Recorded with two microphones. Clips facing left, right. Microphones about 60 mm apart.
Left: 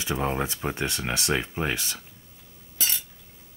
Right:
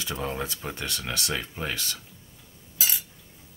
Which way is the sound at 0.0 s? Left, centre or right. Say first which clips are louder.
Left 4 dB; left.